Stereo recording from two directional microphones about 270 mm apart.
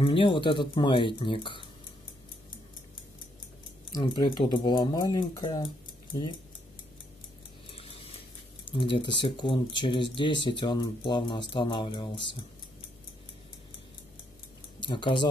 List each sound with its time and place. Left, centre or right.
0.0 s speech: centre
3.9 s speech: centre
7.7 s a sound: left
8.6 s speech: centre
14.8 s speech: centre